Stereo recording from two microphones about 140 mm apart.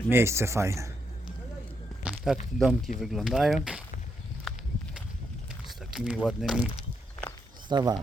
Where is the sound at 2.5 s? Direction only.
Centre (ahead or behind).